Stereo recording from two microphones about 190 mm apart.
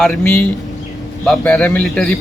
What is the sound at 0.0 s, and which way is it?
A man's voice, 5° left (ahead or behind).